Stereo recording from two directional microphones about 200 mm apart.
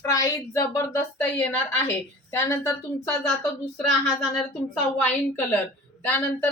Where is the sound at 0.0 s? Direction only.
15° left (ahead or behind).